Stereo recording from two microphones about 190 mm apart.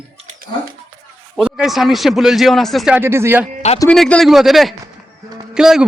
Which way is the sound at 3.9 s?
5° left (ahead or behind).